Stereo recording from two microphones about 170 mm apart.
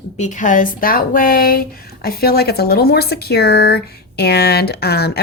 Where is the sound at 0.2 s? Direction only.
45° left (ahead or behind).